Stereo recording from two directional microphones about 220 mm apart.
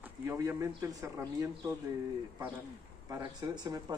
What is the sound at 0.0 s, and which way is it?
Speech, 10° right (ahead or behind).